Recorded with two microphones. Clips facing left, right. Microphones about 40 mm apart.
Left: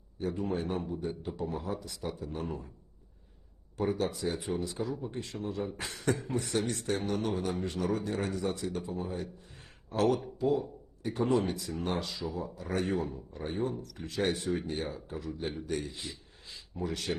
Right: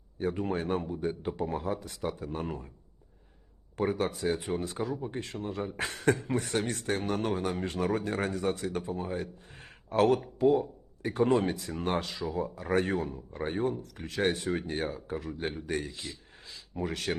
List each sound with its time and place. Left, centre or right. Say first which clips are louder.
0.2 s speech: right 2 dB; right
3.8 s speech: right 2 dB; right